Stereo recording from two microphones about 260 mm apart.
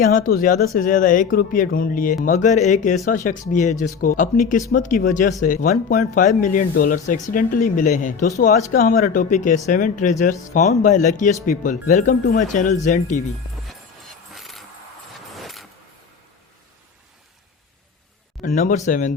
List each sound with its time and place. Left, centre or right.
0.0 s speech: left
14.3 s vehicle: centre
18.4 s speech: left